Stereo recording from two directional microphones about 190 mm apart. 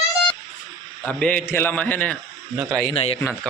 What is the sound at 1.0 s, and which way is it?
Speech, 5° left (ahead or behind).